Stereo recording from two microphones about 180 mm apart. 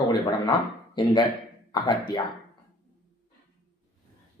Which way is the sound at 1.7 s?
25° left (ahead or behind).